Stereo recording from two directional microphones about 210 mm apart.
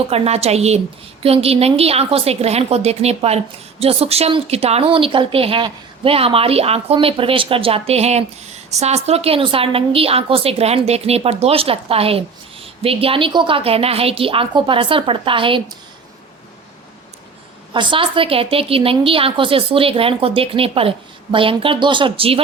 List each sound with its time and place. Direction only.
0.1 s a woman's voice: 30° right (ahead or behind)
17.7 s a woman's voice: 25° right (ahead or behind)